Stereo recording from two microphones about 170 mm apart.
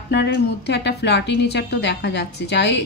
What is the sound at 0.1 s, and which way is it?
A woman's voice, 85° left.